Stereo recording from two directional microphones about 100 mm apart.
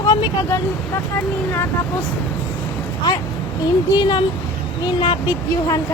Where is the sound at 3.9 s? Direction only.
50° left (ahead or behind).